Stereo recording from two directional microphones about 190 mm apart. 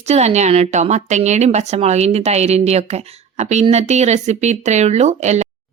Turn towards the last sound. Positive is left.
turn(degrees=-35)  # may be behind; listen again after turning